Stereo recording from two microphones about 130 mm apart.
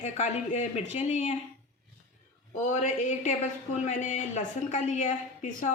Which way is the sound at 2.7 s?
70° left (ahead or behind).